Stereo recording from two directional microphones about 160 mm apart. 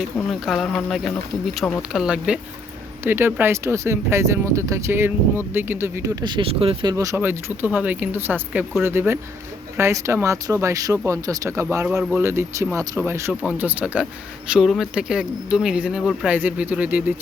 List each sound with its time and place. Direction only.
0.0 s speech: centre (ahead or behind); by 6.1 s 15° right (ahead or behind)
6.2 s speech: 30° right (ahead or behind)
6.9 s speech: 20° right (ahead or behind)
11.9 s speech: 5° right (ahead or behind)
12.2 s speech: 15° right (ahead or behind)